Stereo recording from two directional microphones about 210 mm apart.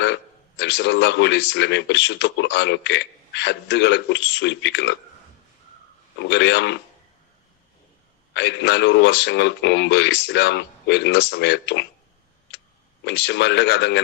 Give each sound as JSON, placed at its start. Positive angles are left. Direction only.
{"t": 0.6, "sound": "speech", "side_deg": 55}
{"t": 6.1, "sound": "speech", "side_deg": 55}
{"t": 8.3, "sound": "speech", "side_deg": 55}
{"t": 13.1, "sound": "speech", "side_deg": 55}